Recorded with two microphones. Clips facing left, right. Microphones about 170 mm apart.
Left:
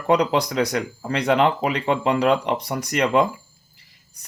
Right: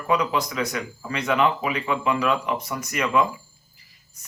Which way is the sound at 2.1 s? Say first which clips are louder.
Left 4 dB; 35° left (ahead or behind).